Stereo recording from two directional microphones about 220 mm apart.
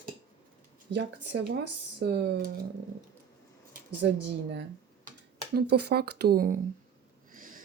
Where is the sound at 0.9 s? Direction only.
50° right (ahead or behind).